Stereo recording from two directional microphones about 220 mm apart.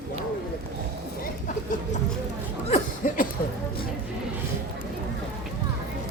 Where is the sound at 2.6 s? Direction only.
30° left (ahead or behind).